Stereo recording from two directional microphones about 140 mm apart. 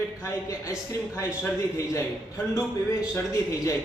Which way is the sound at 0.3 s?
20° left (ahead or behind).